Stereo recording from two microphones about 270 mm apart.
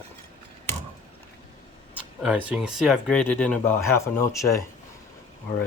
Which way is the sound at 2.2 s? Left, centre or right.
Centre.